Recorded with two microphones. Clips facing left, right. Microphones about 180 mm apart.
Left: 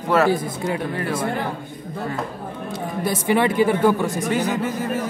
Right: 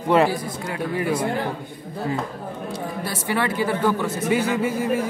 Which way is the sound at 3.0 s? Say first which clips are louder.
Left 6 dB; 20° left (ahead or behind).